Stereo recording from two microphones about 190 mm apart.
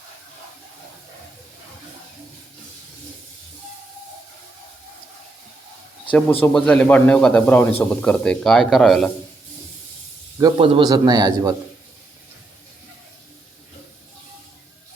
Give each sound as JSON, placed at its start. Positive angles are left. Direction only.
{"t": 6.1, "sound": "a man's voice", "side_deg": 5}
{"t": 10.4, "sound": "a man's voice", "side_deg": -25}